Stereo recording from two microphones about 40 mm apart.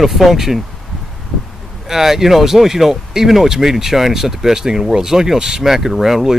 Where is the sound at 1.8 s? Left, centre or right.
Centre.